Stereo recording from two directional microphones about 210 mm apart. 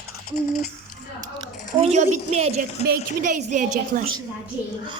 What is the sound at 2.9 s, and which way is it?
Speech, 40° right (ahead or behind).